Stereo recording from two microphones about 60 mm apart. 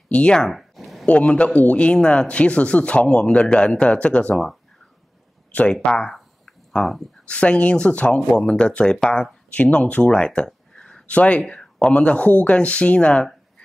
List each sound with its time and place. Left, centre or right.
0.1 s speech: centre
0.5 s a sound: centre
1.0 s a man's voice: left
5.5 s speech: left
5.9 s speech: centre
6.1 s a sound: centre
7.2 s a man's voice: left
11.1 s a man's voice: left